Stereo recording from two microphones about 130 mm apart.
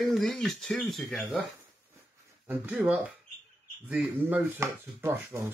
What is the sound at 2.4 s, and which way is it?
Speech, 10° right (ahead or behind).